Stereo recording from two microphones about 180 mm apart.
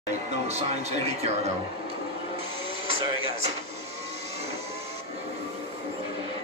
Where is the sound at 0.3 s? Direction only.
35° right (ahead or behind).